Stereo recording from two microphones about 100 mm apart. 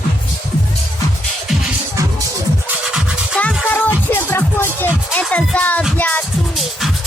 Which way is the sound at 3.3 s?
15° left (ahead or behind).